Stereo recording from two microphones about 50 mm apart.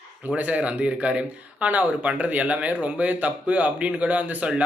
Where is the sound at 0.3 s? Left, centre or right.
Right.